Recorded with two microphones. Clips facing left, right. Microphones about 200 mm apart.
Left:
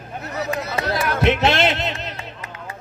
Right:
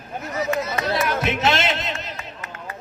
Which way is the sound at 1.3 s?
60° left (ahead or behind).